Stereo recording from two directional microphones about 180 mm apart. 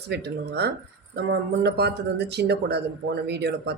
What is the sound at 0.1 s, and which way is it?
Speech, 65° right (ahead or behind).